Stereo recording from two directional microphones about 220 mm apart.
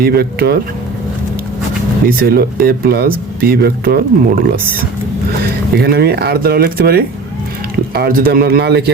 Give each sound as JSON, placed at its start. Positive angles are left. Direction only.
{"t": 0.0, "sound": "speech", "side_deg": -45}
{"t": 2.0, "sound": "speech", "side_deg": -45}